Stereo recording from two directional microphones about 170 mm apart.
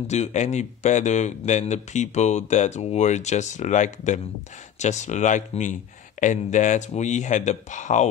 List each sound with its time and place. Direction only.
0.0 s a man's voice: 40° left (ahead or behind)